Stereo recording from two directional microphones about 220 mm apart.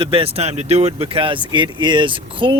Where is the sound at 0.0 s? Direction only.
25° right (ahead or behind).